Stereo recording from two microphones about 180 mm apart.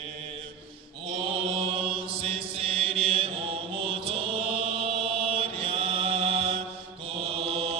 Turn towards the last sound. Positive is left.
turn(degrees=-30)  # may be behind; listen again after turning